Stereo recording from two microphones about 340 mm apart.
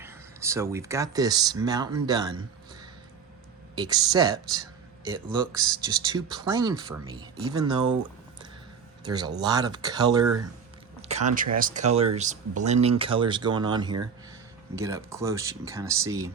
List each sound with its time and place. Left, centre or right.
0.0 s speech: centre
3.8 s speech: centre
9.0 s speech: centre
11.5 s speech: right